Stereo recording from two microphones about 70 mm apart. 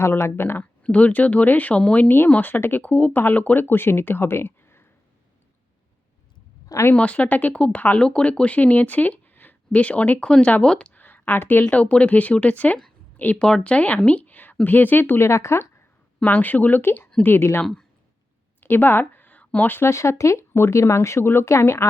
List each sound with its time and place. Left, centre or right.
0.0 s speech: left
0.6 s speech: centre
2.0 s speech: left
6.9 s speech: centre
10.9 s a sound: left
11.6 s speech: centre; by 15.6 s left
16.2 s speech: left
18.6 s speech: left